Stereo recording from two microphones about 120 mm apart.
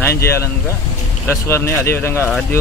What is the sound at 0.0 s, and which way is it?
A man's voice, 20° left (ahead or behind).